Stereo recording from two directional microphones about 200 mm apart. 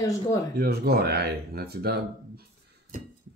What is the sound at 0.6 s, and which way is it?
Speech, 50° right (ahead or behind).